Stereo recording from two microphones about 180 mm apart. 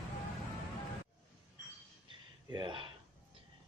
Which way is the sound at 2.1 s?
25° right (ahead or behind).